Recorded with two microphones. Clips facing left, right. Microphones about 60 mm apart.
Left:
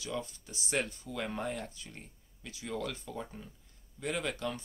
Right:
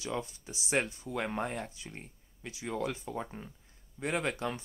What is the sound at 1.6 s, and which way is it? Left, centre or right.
Speech, centre.